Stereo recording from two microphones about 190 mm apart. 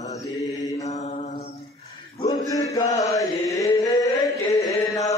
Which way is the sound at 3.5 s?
20° left (ahead or behind).